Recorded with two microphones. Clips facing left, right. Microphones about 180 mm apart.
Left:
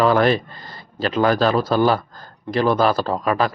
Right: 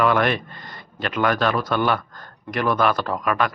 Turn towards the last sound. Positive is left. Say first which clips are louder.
# left 3 dB
turn(degrees=30)  # may be behind; listen again after turning